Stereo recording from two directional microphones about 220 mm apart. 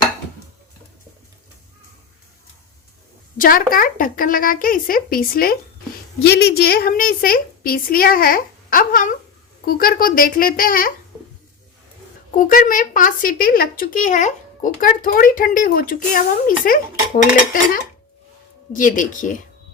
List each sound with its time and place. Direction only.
3.3 s speech: 40° left (ahead or behind)
12.4 s speech: 40° left (ahead or behind)
18.7 s speech: 35° left (ahead or behind)